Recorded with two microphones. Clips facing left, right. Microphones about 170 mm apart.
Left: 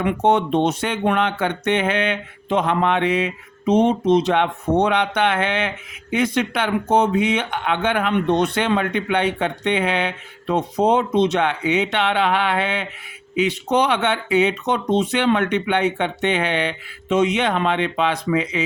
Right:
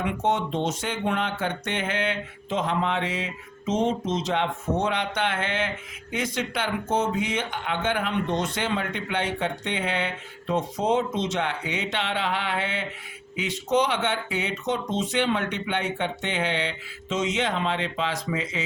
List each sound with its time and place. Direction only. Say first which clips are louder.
0.0 s speech: left 7 dB; 60° left (ahead or behind)